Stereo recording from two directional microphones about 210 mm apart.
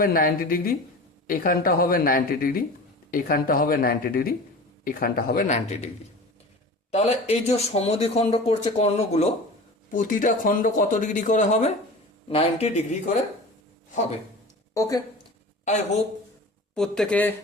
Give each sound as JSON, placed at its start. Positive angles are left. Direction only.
{"t": 0.0, "sound": "speech", "side_deg": 45}
{"t": 6.9, "sound": "speech", "side_deg": 30}
{"t": 14.7, "sound": "speech", "side_deg": 15}
{"t": 16.7, "sound": "speech", "side_deg": 5}